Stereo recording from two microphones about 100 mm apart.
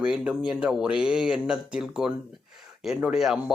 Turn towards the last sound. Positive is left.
turn(degrees=-5)  # may be behind; listen again after turning